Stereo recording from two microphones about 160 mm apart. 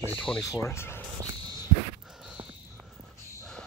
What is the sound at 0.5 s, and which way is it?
Speech, 20° left (ahead or behind).